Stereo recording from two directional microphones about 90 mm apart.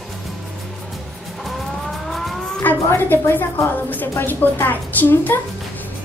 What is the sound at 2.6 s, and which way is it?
A woman's voice, 25° left (ahead or behind).